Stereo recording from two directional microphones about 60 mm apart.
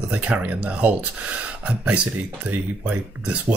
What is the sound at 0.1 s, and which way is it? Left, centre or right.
Speech, right.